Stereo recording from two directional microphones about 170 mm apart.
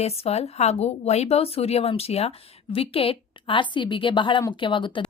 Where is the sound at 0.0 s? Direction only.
35° left (ahead or behind).